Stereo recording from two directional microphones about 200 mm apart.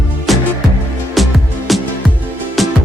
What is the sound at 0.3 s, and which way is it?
Music, centre (ahead or behind).